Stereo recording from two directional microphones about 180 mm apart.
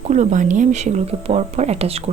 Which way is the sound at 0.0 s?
40° right (ahead or behind).